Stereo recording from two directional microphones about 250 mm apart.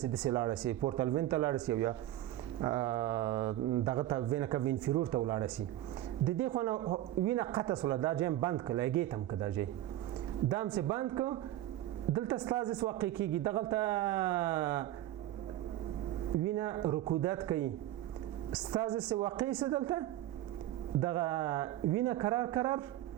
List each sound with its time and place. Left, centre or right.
0.2 s speech: centre
16.6 s speech: centre
18.7 s a woman's voice: centre